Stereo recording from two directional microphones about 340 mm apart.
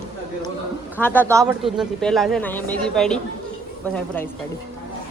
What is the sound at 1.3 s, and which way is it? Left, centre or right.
Speech, centre.